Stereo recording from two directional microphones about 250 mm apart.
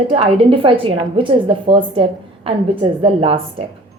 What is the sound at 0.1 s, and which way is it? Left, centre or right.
A woman's voice, right.